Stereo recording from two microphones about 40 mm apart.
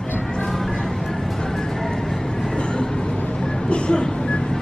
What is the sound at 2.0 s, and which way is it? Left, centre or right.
Vehicle, centre.